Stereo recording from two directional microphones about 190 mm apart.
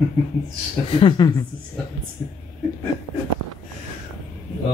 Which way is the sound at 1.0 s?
20° left (ahead or behind).